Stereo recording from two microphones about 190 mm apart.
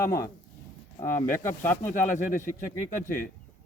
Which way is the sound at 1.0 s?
15° left (ahead or behind).